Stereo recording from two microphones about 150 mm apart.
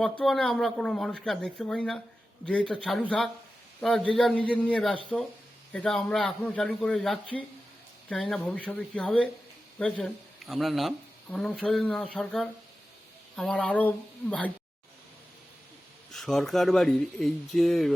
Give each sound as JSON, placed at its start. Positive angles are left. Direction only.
{"t": 0.0, "sound": "speech", "side_deg": 0}
{"t": 3.8, "sound": "speech", "side_deg": 5}
{"t": 16.1, "sound": "speech", "side_deg": 5}